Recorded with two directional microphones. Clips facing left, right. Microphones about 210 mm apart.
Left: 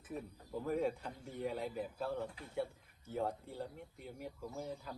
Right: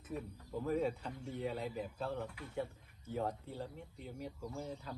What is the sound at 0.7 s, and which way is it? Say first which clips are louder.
Speech: even; 10° left (ahead or behind).